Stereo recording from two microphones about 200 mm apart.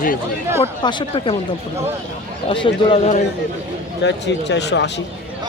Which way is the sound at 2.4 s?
25° left (ahead or behind).